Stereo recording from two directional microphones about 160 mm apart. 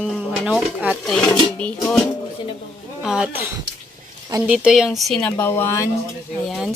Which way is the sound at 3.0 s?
5° right (ahead or behind).